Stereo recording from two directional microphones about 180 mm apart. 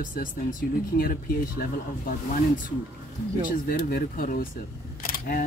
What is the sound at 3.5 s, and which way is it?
Speech, 50° left (ahead or behind).